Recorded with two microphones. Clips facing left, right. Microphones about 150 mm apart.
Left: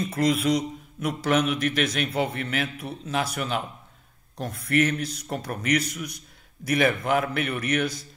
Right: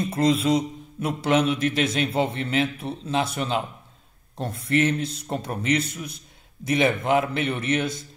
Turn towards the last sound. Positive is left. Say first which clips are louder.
# right 1 dB
turn(degrees=-25)  # may be behind; listen again after turning